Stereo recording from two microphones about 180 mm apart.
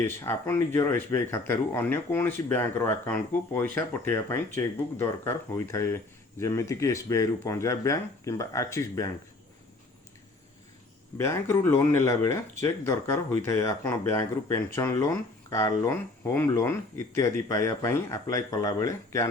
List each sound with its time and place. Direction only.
0.0 s speech: 10° left (ahead or behind)
11.2 s speech: 15° left (ahead or behind)